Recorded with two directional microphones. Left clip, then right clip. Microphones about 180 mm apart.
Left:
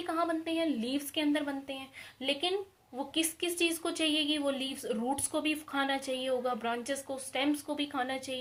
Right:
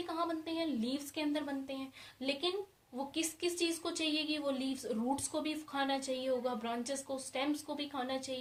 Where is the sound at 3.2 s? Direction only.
45° left (ahead or behind).